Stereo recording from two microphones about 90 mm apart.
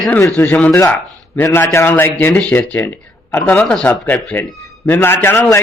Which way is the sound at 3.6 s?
10° left (ahead or behind).